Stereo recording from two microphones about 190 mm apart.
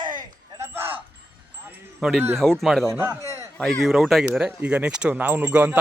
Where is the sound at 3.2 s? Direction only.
15° right (ahead or behind).